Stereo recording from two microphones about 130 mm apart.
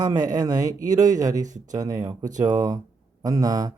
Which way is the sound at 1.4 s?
70° right (ahead or behind).